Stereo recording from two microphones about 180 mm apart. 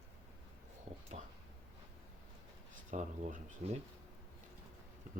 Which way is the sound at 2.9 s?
45° right (ahead or behind).